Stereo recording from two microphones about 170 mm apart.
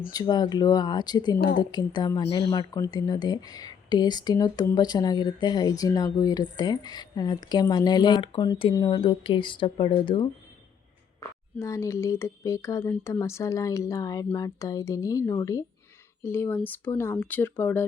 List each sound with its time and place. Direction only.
0.1 s speech: 25° left (ahead or behind)
11.2 s speech: 15° left (ahead or behind)